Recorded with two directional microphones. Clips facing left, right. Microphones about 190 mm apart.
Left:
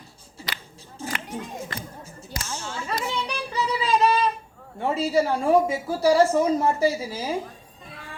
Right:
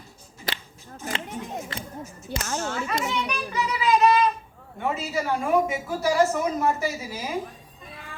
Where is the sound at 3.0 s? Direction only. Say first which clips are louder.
Right 1 dB; 30° left (ahead or behind).